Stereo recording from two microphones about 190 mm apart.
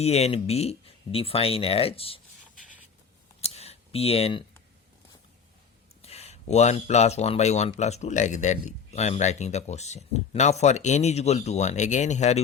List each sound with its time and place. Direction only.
0.0 s speech: 35° left (ahead or behind)
3.4 s a sound: 35° left (ahead or behind)
6.0 s speech: 35° left (ahead or behind)